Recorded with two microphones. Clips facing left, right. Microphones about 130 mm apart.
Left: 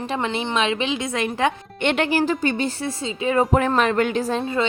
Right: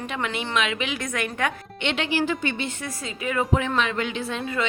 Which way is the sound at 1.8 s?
50° left (ahead or behind).